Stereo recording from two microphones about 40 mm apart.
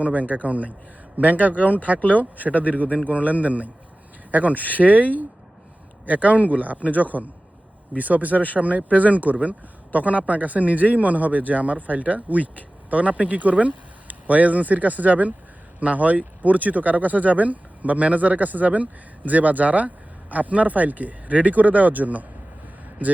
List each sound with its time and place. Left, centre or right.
0.0 s a man's voice: right